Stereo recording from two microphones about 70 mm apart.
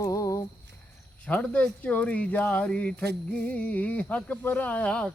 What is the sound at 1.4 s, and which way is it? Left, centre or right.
Speech, centre.